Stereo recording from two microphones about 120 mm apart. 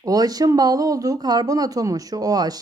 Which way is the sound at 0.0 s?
30° right (ahead or behind).